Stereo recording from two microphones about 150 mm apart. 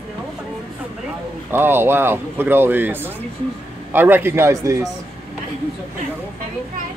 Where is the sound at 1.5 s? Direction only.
15° right (ahead or behind).